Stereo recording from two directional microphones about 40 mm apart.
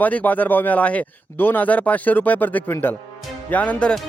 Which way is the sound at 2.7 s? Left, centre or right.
Left.